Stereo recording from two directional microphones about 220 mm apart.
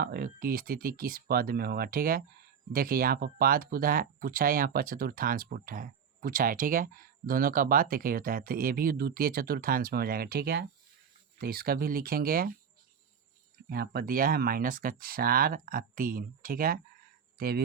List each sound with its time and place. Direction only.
0.0 s speech: 40° right (ahead or behind)
13.7 s speech: 45° right (ahead or behind)